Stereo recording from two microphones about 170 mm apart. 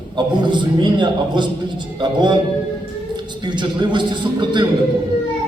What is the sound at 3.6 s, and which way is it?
Speech, 25° right (ahead or behind).